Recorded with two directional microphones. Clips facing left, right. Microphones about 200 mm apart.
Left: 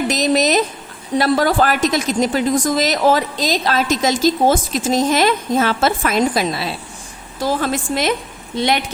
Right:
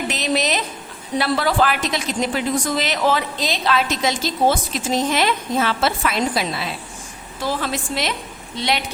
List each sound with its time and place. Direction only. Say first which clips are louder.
0.1 s a woman's voice: left 6 dB; 40° left (ahead or behind)